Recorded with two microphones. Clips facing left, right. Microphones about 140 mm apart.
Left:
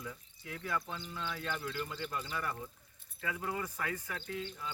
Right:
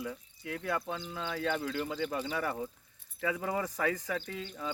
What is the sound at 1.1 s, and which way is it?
Speech, 90° right.